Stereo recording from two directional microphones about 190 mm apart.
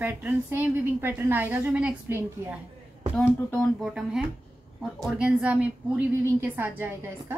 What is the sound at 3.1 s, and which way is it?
A woman's voice, centre (ahead or behind).